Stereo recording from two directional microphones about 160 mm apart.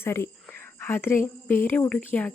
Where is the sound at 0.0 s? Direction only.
15° left (ahead or behind).